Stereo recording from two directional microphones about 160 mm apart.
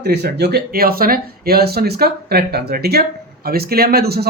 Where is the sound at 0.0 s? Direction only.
90° right.